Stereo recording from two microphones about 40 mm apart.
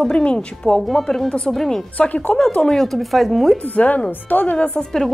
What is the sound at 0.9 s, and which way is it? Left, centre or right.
Speech, centre.